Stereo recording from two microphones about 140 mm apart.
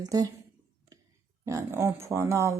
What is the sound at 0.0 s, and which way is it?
Speech, 25° right (ahead or behind).